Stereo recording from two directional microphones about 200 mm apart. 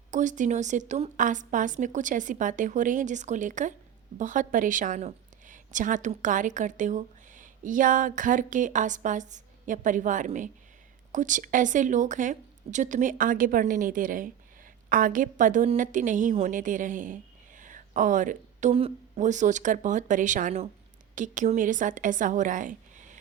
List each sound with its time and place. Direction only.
0.1 s a woman's voice: 40° right (ahead or behind)